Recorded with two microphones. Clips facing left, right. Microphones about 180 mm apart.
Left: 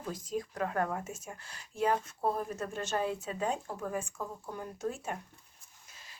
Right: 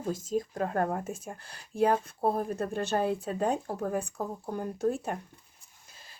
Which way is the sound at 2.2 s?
35° right (ahead or behind).